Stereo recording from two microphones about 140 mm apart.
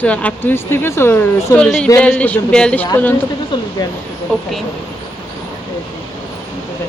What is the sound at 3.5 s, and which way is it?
Speech, 30° left (ahead or behind).